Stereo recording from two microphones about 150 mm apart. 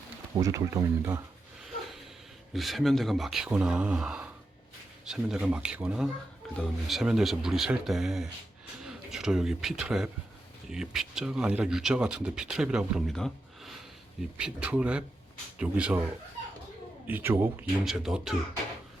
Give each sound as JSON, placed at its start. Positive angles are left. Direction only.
{"t": 0.3, "sound": "speech", "side_deg": -25}
{"t": 2.5, "sound": "speech", "side_deg": 0}
{"t": 17.1, "sound": "speech", "side_deg": -15}